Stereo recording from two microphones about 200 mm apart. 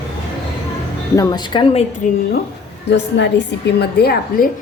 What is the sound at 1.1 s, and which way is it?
Speech, 20° left (ahead or behind).